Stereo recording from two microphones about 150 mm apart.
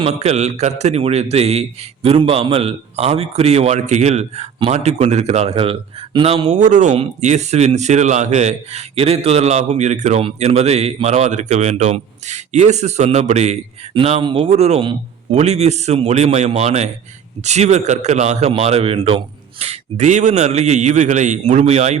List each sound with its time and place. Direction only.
0.0 s a man's voice: 45° right (ahead or behind)
13.9 s a man's voice: 35° right (ahead or behind)